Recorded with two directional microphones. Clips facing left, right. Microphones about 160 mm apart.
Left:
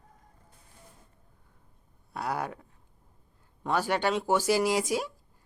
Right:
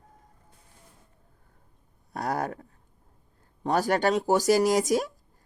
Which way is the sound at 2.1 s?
45° right (ahead or behind).